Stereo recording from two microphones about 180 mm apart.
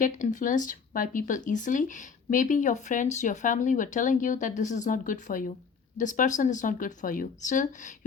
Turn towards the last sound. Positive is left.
turn(degrees=45)  # may be behind; listen again after turning